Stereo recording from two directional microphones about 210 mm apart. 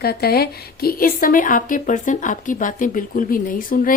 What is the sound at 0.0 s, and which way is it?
Speech, 50° left (ahead or behind).